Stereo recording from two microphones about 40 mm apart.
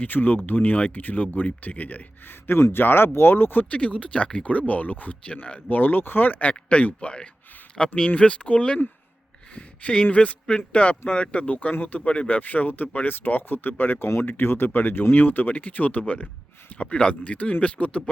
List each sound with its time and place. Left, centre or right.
0.0 s speech: left
2.2 s speech: left
3.6 s speech: left
5.2 s speech: left
5.6 s speech: left
6.5 s speech: left
7.8 s speech: centre
8.1 s speech: left
12.0 s speech: left
12.4 s speech: left